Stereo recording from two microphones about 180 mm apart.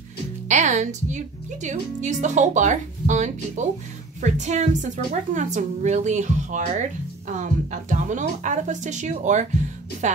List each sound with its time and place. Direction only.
0.5 s a woman's voice: 40° right (ahead or behind)